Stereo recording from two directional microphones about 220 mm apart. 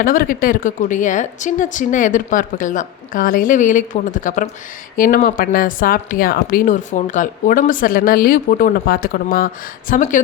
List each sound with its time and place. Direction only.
0.0 s speech: 40° left (ahead or behind)